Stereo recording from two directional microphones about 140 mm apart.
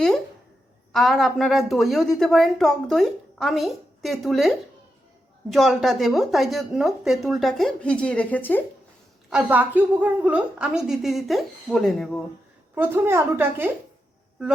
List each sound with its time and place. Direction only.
0.9 s a woman's voice: centre (ahead or behind)
9.3 s a woman's voice: 10° right (ahead or behind)
12.7 s a woman's voice: 15° right (ahead or behind)